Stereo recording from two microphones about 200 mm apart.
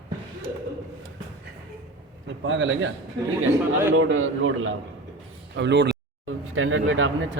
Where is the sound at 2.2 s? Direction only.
70° right (ahead or behind).